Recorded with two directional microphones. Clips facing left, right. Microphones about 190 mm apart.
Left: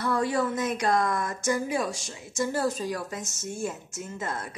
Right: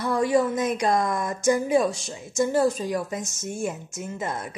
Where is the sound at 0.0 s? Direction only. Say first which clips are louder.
Right 4 dB; 15° right (ahead or behind).